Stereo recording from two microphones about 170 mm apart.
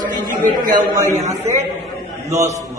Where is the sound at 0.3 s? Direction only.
50° right (ahead or behind).